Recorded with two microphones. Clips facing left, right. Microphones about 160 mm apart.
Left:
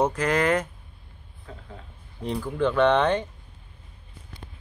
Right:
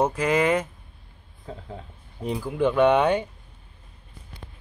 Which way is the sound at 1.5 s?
30° right (ahead or behind).